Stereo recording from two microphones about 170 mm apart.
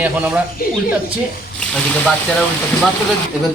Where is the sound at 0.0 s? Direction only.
10° right (ahead or behind).